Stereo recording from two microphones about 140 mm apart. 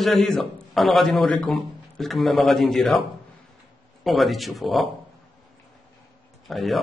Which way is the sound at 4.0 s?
Centre (ahead or behind).